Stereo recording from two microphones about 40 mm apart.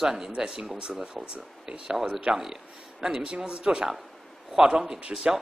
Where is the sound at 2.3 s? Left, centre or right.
Right.